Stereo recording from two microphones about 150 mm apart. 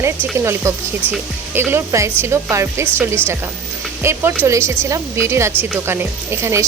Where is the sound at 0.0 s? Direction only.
15° right (ahead or behind).